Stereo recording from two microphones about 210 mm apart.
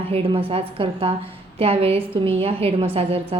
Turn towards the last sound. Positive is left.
turn(degrees=-30)  # may be behind; listen again after turning